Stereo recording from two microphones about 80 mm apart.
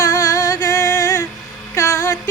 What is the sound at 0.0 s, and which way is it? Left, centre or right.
Music, left.